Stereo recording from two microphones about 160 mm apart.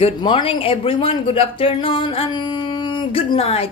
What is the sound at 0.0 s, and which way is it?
Speech, 30° left (ahead or behind).